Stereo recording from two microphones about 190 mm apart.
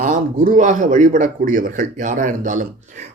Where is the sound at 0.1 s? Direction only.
45° right (ahead or behind).